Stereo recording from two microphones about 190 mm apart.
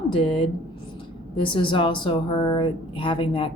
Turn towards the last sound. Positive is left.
turn(degrees=25)  # may be behind; listen again after turning